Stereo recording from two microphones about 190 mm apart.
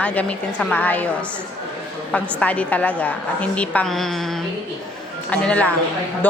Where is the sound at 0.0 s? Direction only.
5° left (ahead or behind).